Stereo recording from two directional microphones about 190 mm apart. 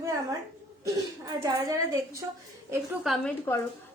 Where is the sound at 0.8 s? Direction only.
20° right (ahead or behind).